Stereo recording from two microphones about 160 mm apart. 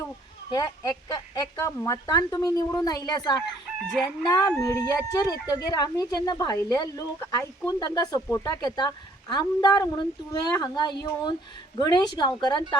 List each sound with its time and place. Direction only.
0.5 s speech: 25° left (ahead or behind)